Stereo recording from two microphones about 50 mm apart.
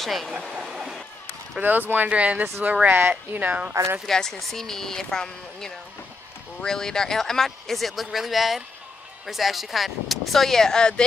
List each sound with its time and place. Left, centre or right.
0.0 s speech: centre
1.6 s speech: right
2.0 s speech: right
2.9 s speech: right
4.0 s speech: centre